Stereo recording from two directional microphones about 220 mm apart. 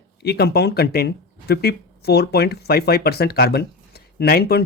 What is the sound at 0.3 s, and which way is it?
Speech, 45° left (ahead or behind).